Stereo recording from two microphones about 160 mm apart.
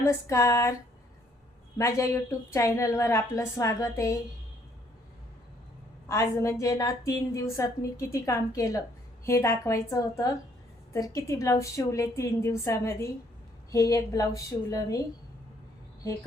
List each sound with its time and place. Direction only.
0.0 s a sound: 15° left (ahead or behind)
1.8 s a woman's voice: 20° left (ahead or behind)
6.1 s a woman's voice: 15° left (ahead or behind)